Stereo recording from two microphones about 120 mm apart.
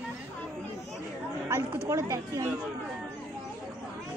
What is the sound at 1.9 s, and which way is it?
Speech, 25° right (ahead or behind).